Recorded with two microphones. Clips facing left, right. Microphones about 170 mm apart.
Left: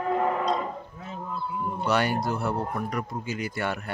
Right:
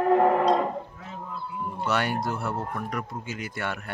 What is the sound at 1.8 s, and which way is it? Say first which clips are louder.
Speech: left 2 dB; centre (ahead or behind).